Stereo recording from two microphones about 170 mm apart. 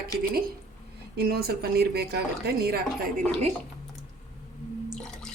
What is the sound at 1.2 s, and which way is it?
A woman's voice, 65° right (ahead or behind).